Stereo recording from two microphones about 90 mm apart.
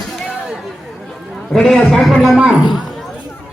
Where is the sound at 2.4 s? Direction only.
10° right (ahead or behind).